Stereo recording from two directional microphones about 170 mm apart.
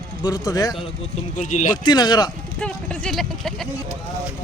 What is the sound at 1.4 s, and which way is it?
Speech, 45° left (ahead or behind).